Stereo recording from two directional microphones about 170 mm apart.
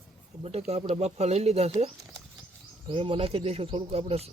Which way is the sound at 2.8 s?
30° right (ahead or behind).